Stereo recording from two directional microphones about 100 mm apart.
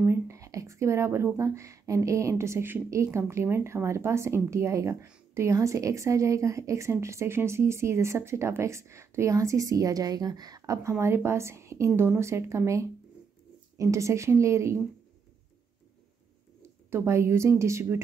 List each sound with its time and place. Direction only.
0.0 s speech: 25° right (ahead or behind)
16.6 s speech: 25° right (ahead or behind)